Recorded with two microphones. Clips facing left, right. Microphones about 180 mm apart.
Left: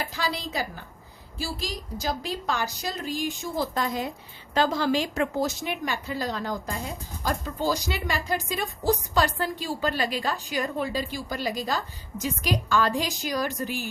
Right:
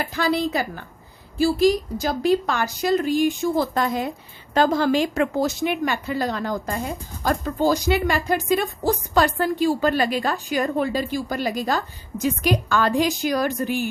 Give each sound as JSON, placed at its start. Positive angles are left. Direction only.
{"t": 0.0, "sound": "speech", "side_deg": -55}